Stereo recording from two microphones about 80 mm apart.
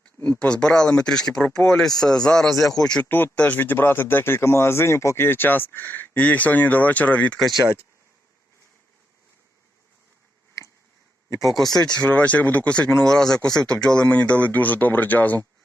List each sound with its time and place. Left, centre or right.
0.3 s speech: centre
3.1 s speech: left
3.3 s speech: centre
7.3 s speech: centre
11.4 s speech: centre; by 15.4 s left